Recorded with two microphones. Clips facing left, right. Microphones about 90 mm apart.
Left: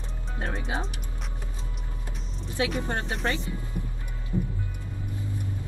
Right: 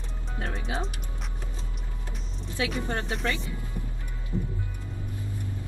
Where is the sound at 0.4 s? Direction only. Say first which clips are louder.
Left 1 dB; 35° left (ahead or behind).